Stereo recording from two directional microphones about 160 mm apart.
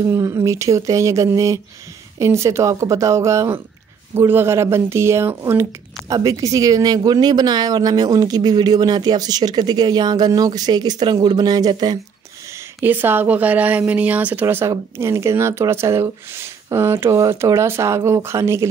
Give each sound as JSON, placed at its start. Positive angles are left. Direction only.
{"t": 0.0, "sound": "speech", "side_deg": -20}
{"t": 12.8, "sound": "speech", "side_deg": -10}